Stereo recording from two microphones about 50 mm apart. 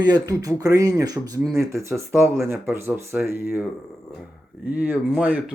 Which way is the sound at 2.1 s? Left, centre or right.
Right.